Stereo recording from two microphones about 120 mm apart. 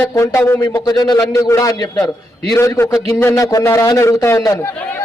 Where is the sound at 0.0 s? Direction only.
20° left (ahead or behind).